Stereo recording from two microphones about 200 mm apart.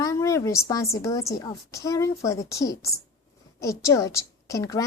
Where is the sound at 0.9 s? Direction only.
15° left (ahead or behind).